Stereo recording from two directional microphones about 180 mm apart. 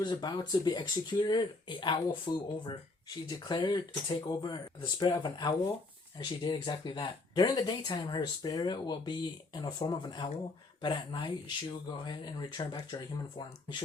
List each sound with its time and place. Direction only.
0.0 s speech: 25° left (ahead or behind)